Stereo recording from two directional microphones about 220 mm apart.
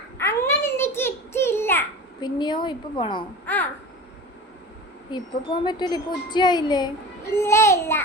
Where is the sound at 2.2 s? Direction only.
20° left (ahead or behind).